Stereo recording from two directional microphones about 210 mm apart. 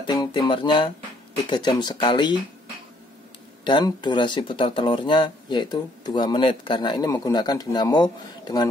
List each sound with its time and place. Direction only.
0.0 s speech: 20° left (ahead or behind)
3.6 s speech: 20° left (ahead or behind)